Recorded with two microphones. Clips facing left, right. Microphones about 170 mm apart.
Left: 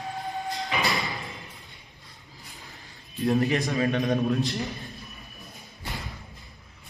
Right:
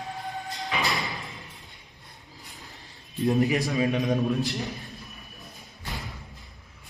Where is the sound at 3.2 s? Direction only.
20° right (ahead or behind).